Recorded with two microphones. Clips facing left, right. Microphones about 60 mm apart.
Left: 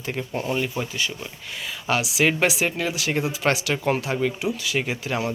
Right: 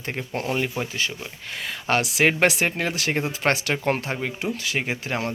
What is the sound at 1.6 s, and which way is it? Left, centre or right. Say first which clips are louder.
Speech: right 1 dB; right.